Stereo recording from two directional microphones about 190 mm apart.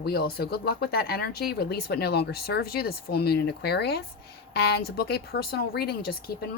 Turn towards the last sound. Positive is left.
turn(degrees=55)  # may be behind; listen again after turning